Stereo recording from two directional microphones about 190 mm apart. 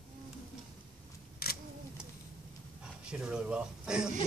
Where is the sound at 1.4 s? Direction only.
55° left (ahead or behind).